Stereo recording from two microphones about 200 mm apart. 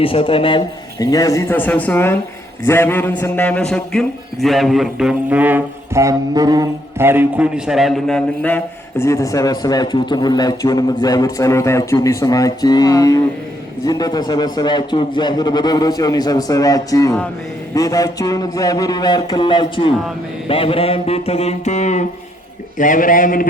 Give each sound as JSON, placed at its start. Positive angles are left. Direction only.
{"t": 0.0, "sound": "a man's voice", "side_deg": 25}
{"t": 20.5, "sound": "music", "side_deg": 30}
{"t": 22.8, "sound": "a man's voice", "side_deg": 40}